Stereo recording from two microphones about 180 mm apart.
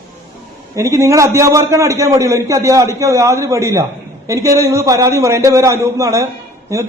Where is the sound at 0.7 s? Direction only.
15° right (ahead or behind).